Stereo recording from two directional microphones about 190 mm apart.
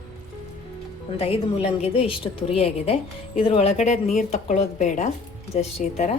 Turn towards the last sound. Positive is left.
turn(degrees=35)  # may be behind; listen again after turning